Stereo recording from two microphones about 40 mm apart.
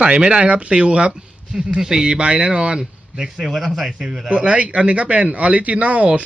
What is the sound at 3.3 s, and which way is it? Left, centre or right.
Speech, centre.